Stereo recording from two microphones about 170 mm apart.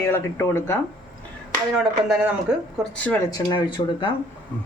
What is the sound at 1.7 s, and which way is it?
Speech, centre (ahead or behind).